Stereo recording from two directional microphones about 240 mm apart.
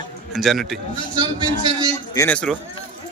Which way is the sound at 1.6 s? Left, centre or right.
Centre.